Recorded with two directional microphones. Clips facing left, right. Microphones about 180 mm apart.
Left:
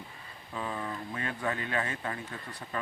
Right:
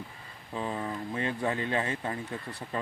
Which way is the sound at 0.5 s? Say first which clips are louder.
Right 3 dB; 25° right (ahead or behind).